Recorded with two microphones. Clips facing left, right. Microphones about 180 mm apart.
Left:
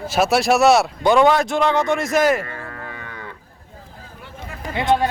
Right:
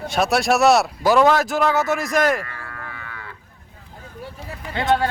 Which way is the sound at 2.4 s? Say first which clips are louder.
Left 4 dB; 25° left (ahead or behind).